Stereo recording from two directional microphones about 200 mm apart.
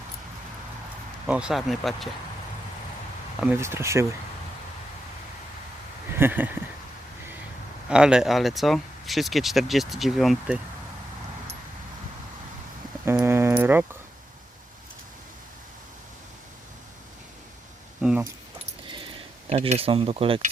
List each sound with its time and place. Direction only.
1.3 s speech: 5° right (ahead or behind)
3.4 s speech: 10° right (ahead or behind)
6.1 s speech: 10° right (ahead or behind)
7.9 s speech: 5° right (ahead or behind)
13.1 s a sound: 10° right (ahead or behind)
18.0 s keys jangling: 5° right (ahead or behind)
19.5 s speech: 30° right (ahead or behind)